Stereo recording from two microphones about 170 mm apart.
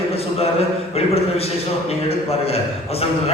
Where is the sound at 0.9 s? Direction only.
35° left (ahead or behind).